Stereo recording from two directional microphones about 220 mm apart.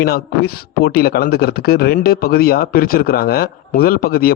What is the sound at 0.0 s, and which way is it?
A man's voice, 45° left (ahead or behind).